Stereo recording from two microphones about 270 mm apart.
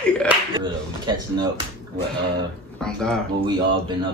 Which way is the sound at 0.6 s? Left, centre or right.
Centre.